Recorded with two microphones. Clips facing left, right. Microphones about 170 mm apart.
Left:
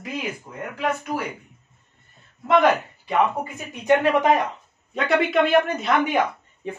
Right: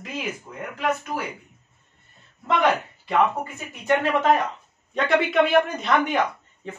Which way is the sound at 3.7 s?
15° left (ahead or behind).